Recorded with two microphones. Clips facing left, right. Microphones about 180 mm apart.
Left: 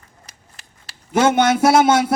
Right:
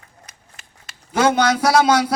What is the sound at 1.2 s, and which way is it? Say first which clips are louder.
Speech: left 2 dB; 25° left (ahead or behind).